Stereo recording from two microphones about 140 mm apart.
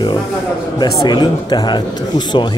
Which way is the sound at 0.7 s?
30° left (ahead or behind).